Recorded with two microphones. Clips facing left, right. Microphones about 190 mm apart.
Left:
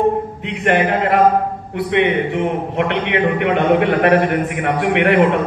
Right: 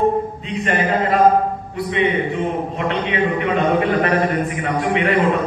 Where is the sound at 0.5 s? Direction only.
65° left (ahead or behind).